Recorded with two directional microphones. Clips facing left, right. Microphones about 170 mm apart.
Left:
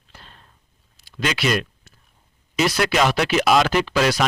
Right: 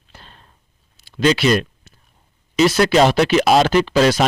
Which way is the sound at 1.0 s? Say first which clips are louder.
Right 7 dB; 30° right (ahead or behind).